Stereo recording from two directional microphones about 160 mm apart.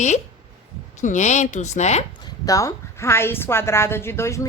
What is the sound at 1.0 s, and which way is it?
Speech, 50° left (ahead or behind).